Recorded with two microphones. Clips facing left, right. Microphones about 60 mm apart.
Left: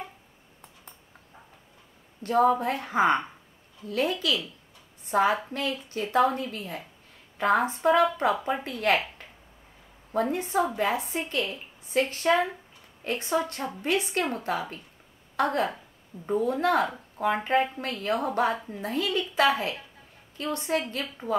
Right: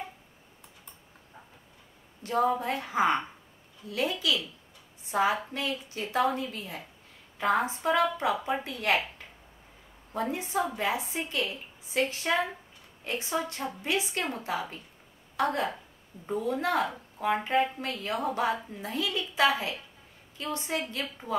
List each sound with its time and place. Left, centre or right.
2.2 s a woman's voice: left
10.3 s a woman's voice: left